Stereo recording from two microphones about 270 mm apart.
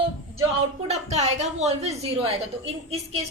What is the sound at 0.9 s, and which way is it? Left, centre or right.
A woman's voice, right.